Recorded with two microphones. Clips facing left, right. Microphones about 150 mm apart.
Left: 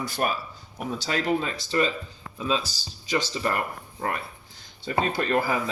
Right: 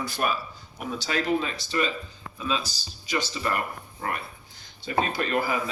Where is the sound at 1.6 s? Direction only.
25° left (ahead or behind).